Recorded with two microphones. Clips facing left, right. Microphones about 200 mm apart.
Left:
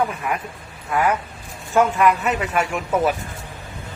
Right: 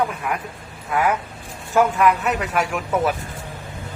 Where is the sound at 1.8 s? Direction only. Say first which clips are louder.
Even; centre (ahead or behind).